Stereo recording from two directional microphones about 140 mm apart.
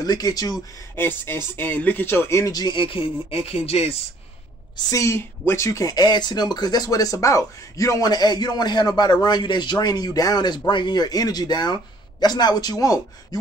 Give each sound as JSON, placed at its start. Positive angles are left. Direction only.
{"t": 0.0, "sound": "speech", "side_deg": 30}
{"t": 0.9, "sound": "speech", "side_deg": 15}
{"t": 4.9, "sound": "speech", "side_deg": 20}